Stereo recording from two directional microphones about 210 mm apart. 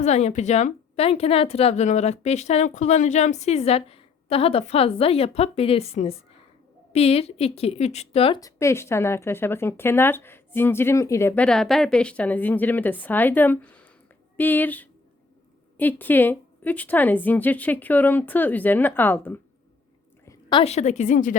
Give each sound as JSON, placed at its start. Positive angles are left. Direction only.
{"t": 0.0, "sound": "a woman's voice", "side_deg": 30}
{"t": 8.4, "sound": "a woman's voice", "side_deg": 15}